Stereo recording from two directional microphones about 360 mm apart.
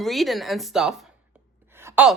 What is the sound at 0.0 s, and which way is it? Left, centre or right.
A woman's voice, centre.